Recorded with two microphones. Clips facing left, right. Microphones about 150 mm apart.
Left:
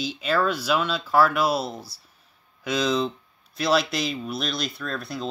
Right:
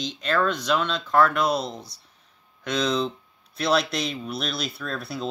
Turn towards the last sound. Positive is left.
turn(degrees=0)  # may be behind; listen again after turning